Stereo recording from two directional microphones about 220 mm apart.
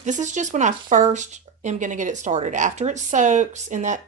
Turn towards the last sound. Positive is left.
turn(degrees=-35)  # may be behind; listen again after turning